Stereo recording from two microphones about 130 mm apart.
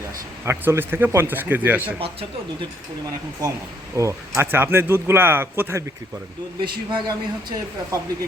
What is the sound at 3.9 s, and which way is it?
Speech, 20° right (ahead or behind).